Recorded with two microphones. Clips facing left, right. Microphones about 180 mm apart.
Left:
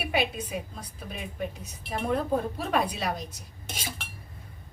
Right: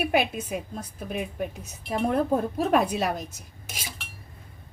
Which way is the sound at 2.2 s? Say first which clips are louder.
Right 4 dB; 45° right (ahead or behind).